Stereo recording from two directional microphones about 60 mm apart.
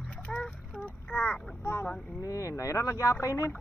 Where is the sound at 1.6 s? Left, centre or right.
Left.